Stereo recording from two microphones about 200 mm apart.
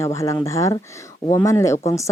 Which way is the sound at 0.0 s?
15° left (ahead or behind).